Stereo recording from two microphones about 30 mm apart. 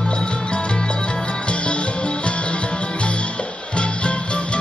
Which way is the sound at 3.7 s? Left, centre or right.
Left.